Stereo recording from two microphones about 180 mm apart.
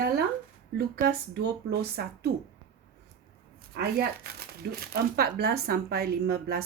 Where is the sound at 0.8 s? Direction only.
60° right (ahead or behind).